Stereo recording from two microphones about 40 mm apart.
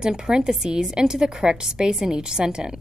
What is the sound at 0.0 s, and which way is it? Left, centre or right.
A woman's voice, centre.